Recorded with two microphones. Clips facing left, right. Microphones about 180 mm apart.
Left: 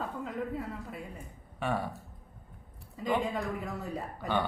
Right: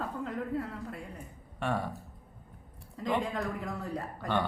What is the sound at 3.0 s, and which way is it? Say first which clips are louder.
A woman's voice: left 1 dB; 5° left (ahead or behind).